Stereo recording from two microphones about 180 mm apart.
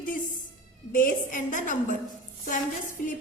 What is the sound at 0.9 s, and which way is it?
Speech, 50° left (ahead or behind).